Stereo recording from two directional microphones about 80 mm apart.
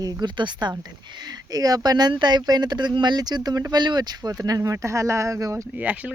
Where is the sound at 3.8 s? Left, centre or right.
Right.